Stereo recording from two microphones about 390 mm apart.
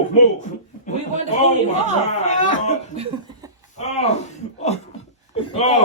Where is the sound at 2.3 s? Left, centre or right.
Centre.